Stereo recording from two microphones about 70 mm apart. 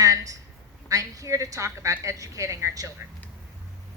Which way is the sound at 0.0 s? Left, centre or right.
Right.